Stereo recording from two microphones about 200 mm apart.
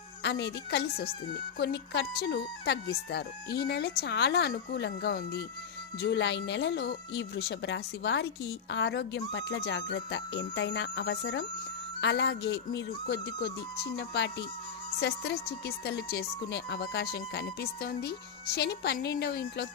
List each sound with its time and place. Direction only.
0.2 s speech: 60° left (ahead or behind)